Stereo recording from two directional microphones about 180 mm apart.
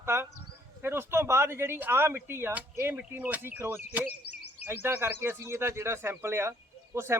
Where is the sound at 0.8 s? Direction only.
15° right (ahead or behind).